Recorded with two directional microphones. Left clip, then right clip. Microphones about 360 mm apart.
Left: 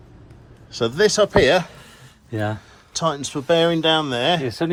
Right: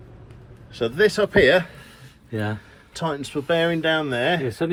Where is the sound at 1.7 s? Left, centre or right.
Left.